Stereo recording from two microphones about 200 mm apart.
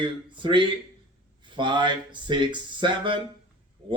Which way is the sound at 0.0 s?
25° right (ahead or behind).